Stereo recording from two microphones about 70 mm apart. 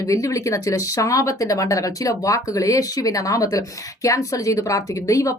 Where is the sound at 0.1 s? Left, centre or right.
Left.